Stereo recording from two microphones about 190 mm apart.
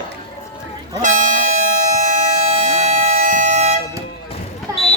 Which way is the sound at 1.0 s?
40° right (ahead or behind).